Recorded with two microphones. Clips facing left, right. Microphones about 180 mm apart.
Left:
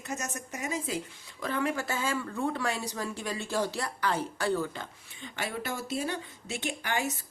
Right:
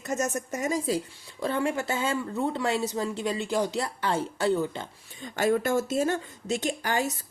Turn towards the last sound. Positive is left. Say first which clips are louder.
# right 4 dB
turn(degrees=-35)  # may be behind; listen again after turning